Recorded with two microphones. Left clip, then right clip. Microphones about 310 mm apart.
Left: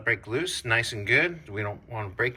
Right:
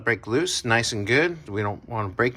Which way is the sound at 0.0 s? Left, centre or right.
Centre.